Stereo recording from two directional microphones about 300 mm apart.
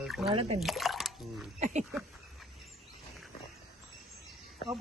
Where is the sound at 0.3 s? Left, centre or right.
Centre.